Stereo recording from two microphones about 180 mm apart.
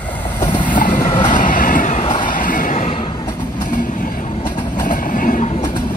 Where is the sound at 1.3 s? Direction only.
45° left (ahead or behind).